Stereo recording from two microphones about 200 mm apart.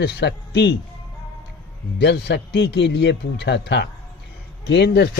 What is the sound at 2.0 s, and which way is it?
Speech, 55° left (ahead or behind).